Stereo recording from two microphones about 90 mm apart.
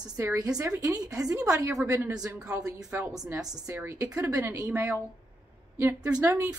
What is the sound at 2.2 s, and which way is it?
A woman's voice, 35° right (ahead or behind).